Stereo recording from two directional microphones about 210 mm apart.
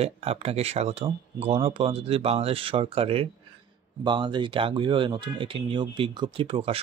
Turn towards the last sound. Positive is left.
turn(degrees=-25)  # may be behind; listen again after turning